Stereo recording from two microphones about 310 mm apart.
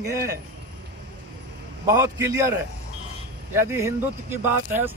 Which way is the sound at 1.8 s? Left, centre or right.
Centre.